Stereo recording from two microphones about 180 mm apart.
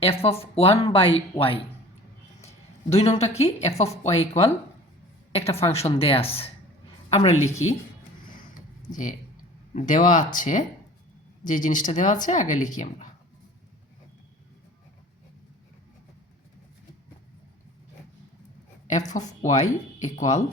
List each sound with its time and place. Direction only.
0.0 s speech: 35° left (ahead or behind)
2.9 s a woman's voice: 35° left (ahead or behind)
8.9 s speech: 45° left (ahead or behind)
18.9 s speech: 40° left (ahead or behind)